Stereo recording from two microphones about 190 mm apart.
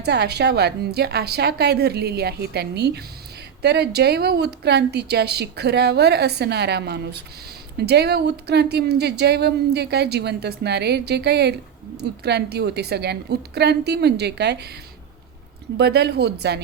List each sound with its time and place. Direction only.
0.0 s a woman's voice: 60° right (ahead or behind)
15.8 s a woman's voice: 60° right (ahead or behind)